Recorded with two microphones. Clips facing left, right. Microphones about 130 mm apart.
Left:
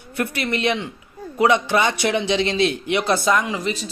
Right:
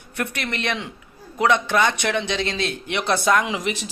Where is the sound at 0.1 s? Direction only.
5° left (ahead or behind).